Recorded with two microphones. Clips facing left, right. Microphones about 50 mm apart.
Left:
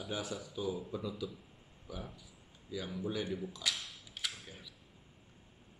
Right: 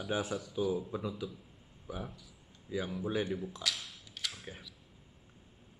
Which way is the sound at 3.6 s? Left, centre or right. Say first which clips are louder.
Right 1 dB; centre.